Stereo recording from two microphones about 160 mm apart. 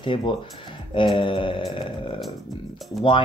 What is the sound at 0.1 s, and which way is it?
Speech, 35° left (ahead or behind).